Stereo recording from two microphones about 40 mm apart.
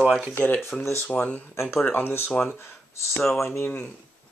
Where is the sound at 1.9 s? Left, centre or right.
Left.